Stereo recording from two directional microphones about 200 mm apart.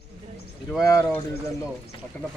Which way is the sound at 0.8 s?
15° left (ahead or behind).